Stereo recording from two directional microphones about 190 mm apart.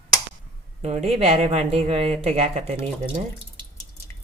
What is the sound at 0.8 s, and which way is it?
Speech, 35° right (ahead or behind).